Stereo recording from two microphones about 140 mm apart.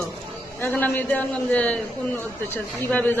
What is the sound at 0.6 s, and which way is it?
A man's voice, 10° left (ahead or behind).